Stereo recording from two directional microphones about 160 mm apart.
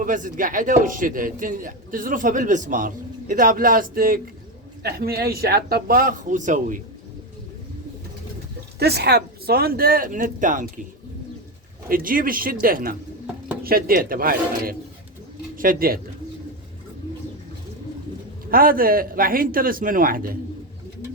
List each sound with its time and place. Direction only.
0.0 s a man's voice: 55° right (ahead or behind)
4.8 s speech: 80° right; by 6.7 s 50° right (ahead or behind)
8.8 s speech: 90° right; by 10.7 s 55° right (ahead or behind)
11.9 s a man's voice: 60° right (ahead or behind)
18.5 s a man's voice: 65° right (ahead or behind)